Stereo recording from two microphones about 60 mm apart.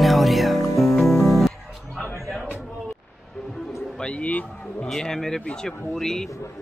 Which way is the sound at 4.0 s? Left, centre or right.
Centre.